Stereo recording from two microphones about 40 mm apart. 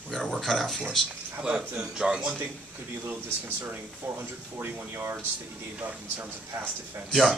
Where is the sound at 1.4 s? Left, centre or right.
Right.